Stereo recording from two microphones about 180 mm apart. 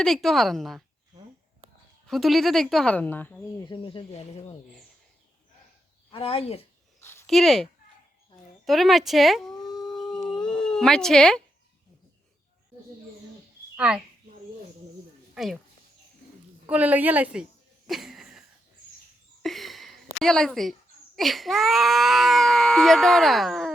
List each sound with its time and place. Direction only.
0.0 s speech: centre (ahead or behind)
2.0 s speech: centre (ahead or behind)
3.6 s speech: 25° left (ahead or behind)
6.1 s speech: 30° left (ahead or behind)
7.0 s a sound: 15° left (ahead or behind)
7.3 s speech: centre (ahead or behind)
9.9 s howl: centre (ahead or behind)
13.7 s a child's voice: 5° right (ahead or behind)
16.6 s a woman's voice: 10° right (ahead or behind)
17.8 s a sound: centre (ahead or behind)
21.2 s speech: centre (ahead or behind)